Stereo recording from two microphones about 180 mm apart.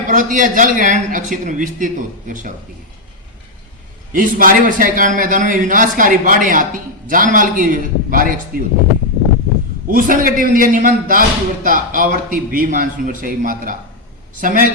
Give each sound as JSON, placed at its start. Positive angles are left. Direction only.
{"t": 0.1, "sound": "a man's voice", "side_deg": -45}
{"t": 4.1, "sound": "a man's voice", "side_deg": -50}
{"t": 9.9, "sound": "a man's voice", "side_deg": -50}